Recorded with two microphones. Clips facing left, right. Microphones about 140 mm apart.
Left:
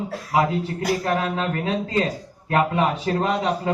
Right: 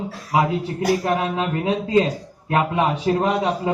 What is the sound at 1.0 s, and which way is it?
A man's voice, 20° right (ahead or behind).